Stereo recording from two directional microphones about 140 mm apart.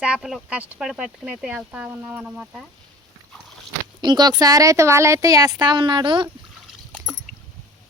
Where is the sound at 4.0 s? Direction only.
30° right (ahead or behind).